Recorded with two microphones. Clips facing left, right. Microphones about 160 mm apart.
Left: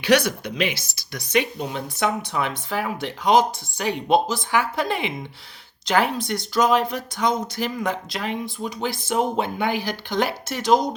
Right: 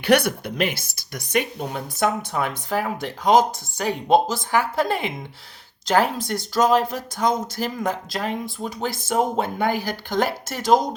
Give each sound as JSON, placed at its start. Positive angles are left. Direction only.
{"t": 0.0, "sound": "speech", "side_deg": -55}